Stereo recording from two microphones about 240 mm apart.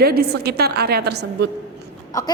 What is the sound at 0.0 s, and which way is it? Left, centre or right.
A woman's voice, right.